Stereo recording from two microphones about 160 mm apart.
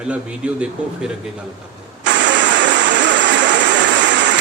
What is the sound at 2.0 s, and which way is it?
Vehicle, 90° right.